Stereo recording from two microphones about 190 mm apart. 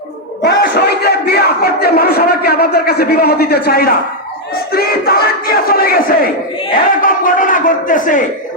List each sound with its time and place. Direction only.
0.4 s a man's voice: 60° left (ahead or behind)
4.5 s crowd: 55° left (ahead or behind)
6.7 s a man's voice: 45° left (ahead or behind)